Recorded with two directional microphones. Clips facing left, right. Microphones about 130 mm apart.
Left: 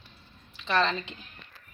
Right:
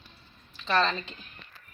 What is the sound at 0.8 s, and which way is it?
Speech, 20° left (ahead or behind).